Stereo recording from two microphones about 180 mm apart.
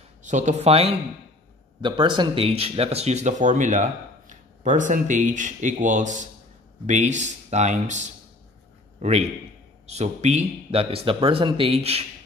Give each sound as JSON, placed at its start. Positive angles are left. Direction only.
{"t": 0.2, "sound": "speech", "side_deg": -40}